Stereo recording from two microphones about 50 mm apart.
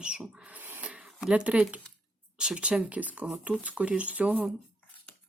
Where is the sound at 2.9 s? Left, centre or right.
Right.